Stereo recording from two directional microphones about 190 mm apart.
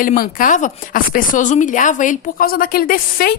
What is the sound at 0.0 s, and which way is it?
Speech, 45° left (ahead or behind).